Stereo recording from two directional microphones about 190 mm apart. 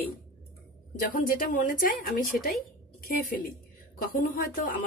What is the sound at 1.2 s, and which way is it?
Speech, 45° left (ahead or behind).